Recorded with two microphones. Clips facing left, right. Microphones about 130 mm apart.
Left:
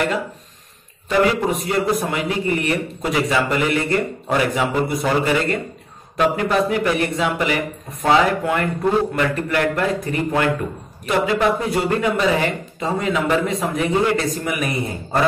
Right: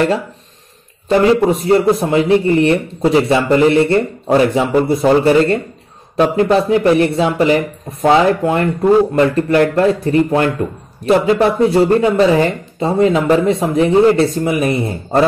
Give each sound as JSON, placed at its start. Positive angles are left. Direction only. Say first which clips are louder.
{"t": 1.0, "sound": "a man's voice", "louder": "right 7 dB", "side_deg": -25}